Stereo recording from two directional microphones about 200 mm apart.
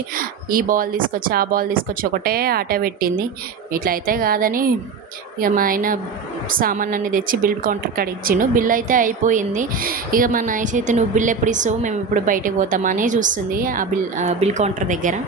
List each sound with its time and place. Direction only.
0.2 s a woman's voice: 45° right (ahead or behind)